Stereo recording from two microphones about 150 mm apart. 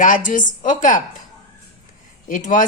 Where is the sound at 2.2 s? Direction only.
60° left (ahead or behind).